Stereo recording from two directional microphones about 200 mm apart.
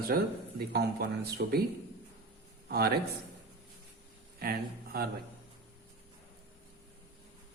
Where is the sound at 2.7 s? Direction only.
50° right (ahead or behind).